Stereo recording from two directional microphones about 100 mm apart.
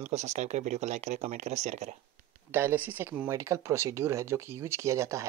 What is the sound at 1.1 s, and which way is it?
Speech, 90° right.